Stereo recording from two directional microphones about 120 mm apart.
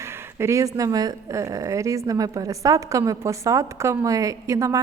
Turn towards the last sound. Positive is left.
turn(degrees=-25)  # may be behind; listen again after turning